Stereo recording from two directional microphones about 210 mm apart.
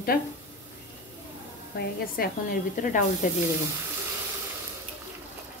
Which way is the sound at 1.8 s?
40° left (ahead or behind).